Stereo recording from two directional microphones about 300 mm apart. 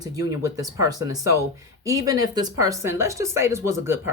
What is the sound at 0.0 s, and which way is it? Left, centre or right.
Speech, centre.